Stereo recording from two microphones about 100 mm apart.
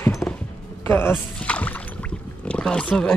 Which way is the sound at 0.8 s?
20° left (ahead or behind).